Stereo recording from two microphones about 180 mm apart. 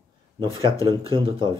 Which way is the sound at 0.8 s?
30° right (ahead or behind).